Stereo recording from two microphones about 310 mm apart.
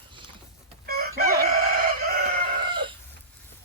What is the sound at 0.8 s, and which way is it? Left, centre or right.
Chicken, right.